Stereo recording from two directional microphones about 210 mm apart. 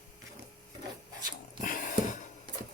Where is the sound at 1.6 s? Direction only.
40° left (ahead or behind).